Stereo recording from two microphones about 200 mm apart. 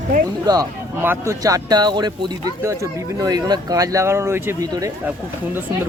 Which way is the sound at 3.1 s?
20° right (ahead or behind).